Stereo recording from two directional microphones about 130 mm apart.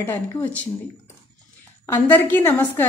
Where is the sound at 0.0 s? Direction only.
15° left (ahead or behind).